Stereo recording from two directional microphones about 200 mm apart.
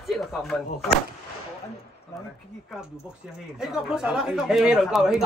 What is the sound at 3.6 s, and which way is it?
Speech, 5° right (ahead or behind).